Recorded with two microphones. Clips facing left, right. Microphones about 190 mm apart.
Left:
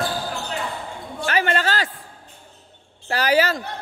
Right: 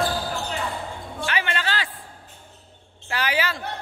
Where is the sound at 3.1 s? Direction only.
40° left (ahead or behind).